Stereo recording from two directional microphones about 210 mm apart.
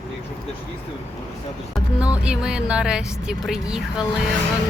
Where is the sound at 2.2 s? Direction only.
5° right (ahead or behind).